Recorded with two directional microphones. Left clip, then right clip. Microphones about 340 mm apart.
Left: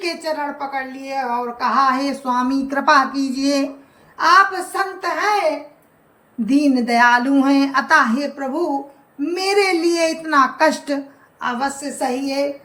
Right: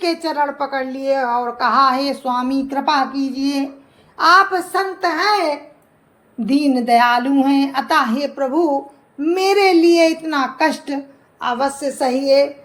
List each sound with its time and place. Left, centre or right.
0.0 s a woman's voice: centre